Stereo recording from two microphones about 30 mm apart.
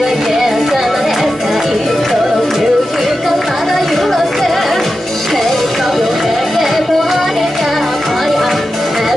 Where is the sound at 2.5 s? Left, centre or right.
Centre.